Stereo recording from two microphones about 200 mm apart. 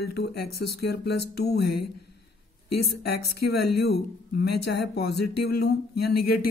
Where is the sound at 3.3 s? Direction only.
55° left (ahead or behind).